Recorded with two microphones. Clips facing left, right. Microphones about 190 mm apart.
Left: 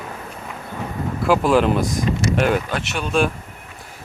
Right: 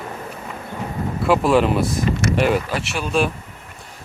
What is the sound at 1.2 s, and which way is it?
Speech, centre (ahead or behind).